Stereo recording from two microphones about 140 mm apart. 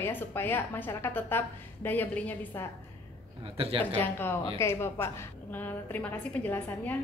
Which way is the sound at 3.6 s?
40° right (ahead or behind).